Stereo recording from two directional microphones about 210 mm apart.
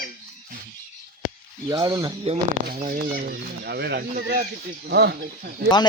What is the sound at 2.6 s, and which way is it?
Speech, 45° right (ahead or behind).